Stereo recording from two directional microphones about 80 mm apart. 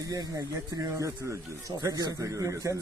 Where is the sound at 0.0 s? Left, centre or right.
Right.